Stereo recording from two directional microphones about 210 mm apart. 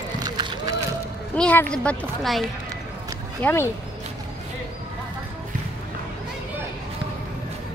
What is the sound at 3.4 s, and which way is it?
Speech, 5° left (ahead or behind).